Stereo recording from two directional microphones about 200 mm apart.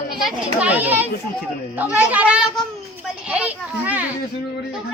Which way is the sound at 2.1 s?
5° right (ahead or behind).